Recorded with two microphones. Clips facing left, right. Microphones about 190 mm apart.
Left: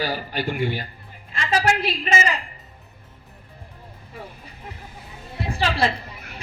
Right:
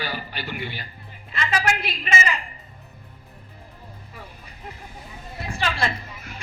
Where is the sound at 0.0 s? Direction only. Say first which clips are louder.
Left 6 dB; 45° left (ahead or behind).